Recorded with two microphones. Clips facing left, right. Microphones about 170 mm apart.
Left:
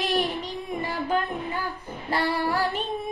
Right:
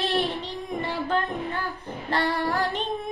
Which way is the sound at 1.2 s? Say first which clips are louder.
Right 1 dB; centre (ahead or behind).